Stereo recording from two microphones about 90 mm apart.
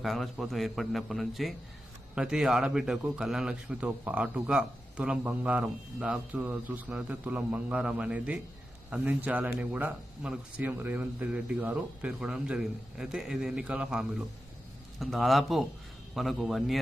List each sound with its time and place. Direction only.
0.0 s a man's voice: centre (ahead or behind)